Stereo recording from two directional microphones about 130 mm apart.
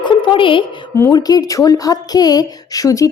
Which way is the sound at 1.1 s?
30° left (ahead or behind).